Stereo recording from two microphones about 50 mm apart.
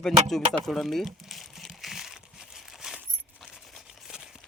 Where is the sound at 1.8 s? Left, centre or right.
Centre.